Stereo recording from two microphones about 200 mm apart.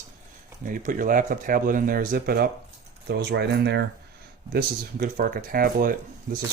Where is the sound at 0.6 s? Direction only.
45° right (ahead or behind).